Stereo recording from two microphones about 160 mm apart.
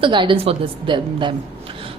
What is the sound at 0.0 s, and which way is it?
A woman's voice, 30° right (ahead or behind).